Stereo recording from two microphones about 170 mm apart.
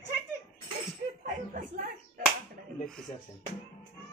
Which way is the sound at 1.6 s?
50° right (ahead or behind).